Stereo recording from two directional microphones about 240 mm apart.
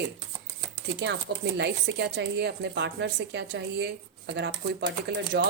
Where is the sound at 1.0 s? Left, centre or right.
Right.